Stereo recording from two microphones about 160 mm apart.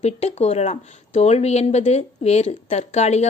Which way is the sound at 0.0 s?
45° left (ahead or behind).